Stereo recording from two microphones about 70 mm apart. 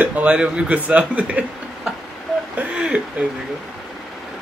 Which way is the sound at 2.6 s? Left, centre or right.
Centre.